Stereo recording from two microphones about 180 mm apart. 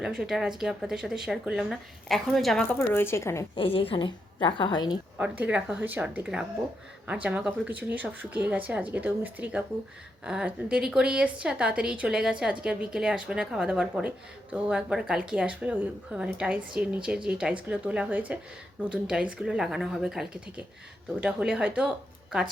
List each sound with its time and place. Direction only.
0.0 s a woman's voice: 5° right (ahead or behind)
2.7 s speech: 15° left (ahead or behind)
3.5 s a woman's voice: 30° left (ahead or behind)
5.1 s a woman's voice: 10° right (ahead or behind)